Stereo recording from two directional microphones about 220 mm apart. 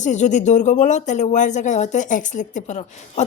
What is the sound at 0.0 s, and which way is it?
Speech, 35° left (ahead or behind).